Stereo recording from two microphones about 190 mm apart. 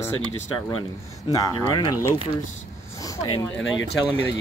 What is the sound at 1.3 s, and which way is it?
Speech, 20° left (ahead or behind).